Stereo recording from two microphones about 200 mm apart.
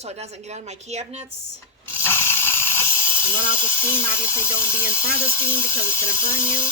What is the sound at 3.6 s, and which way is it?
Speech, 10° left (ahead or behind).